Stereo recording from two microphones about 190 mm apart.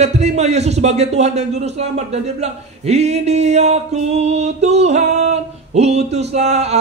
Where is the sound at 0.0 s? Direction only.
35° right (ahead or behind).